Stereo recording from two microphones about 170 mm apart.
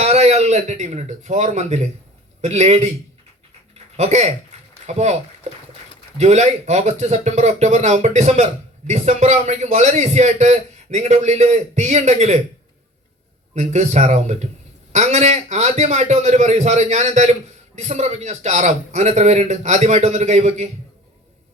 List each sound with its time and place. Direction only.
0.0 s speech: 40° right (ahead or behind)
3.9 s speech: 40° right (ahead or behind)
6.1 s a man's voice: 40° right (ahead or behind)
13.5 s a man's voice: 40° right (ahead or behind)